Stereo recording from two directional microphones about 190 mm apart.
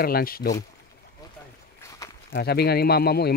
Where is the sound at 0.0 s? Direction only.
50° left (ahead or behind).